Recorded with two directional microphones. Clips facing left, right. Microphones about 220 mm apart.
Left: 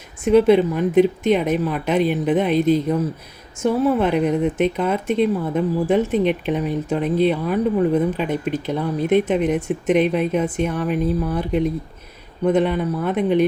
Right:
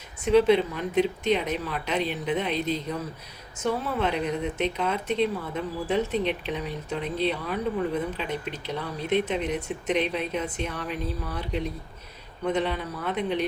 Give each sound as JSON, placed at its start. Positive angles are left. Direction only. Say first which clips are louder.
{"t": 0.3, "sound": "speech", "louder": "left 6 dB", "side_deg": 50}
{"t": 4.0, "sound": "speech", "louder": "left 9 dB", "side_deg": 50}